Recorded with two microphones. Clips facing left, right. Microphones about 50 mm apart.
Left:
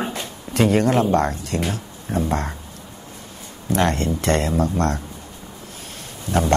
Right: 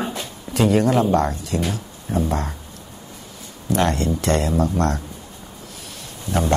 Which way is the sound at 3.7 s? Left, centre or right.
Left.